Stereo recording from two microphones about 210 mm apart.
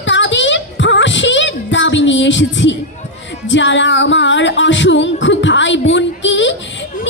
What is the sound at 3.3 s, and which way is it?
Music, 60° left (ahead or behind).